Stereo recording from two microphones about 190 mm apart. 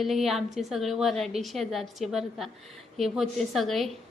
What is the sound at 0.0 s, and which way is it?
A woman's voice, centre (ahead or behind).